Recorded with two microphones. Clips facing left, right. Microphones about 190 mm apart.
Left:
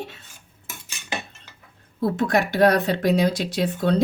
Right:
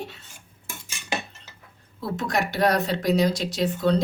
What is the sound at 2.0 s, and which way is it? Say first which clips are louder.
Speech: left 5 dB; 55° left (ahead or behind).